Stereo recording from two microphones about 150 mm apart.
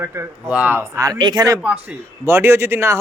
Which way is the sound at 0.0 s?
15° right (ahead or behind).